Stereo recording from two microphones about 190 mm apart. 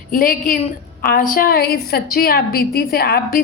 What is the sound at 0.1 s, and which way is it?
A woman's voice, 45° left (ahead or behind).